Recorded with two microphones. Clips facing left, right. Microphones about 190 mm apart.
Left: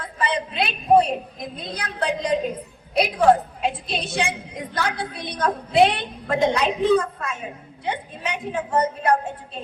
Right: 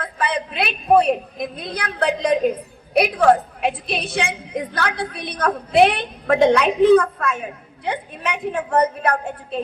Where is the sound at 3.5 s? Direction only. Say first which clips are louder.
Right 3 dB; 65° right (ahead or behind).